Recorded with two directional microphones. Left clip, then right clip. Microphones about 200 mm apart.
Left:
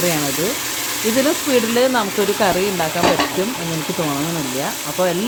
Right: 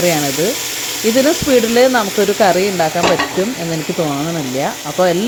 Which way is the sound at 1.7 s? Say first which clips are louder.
Right 6 dB; 20° right (ahead or behind).